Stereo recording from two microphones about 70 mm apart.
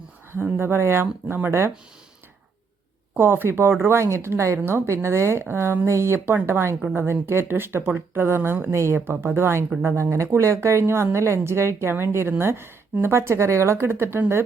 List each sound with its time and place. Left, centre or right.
0.3 s speech: right
3.2 s speech: right
6.1 s speech: right
8.7 s a woman's voice: right